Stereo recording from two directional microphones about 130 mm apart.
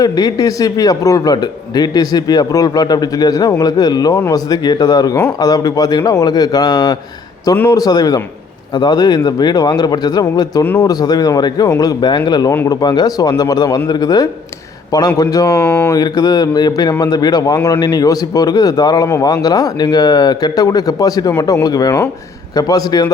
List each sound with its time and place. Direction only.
0.0 s a man's voice: 30° left (ahead or behind)
10.6 s speech: 15° left (ahead or behind)
10.8 s a man's voice: 30° left (ahead or behind)
15.6 s speech: 10° left (ahead or behind)
15.9 s a man's voice: 30° left (ahead or behind)